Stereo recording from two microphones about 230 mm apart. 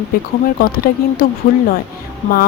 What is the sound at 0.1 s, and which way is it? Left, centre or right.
Speech, left.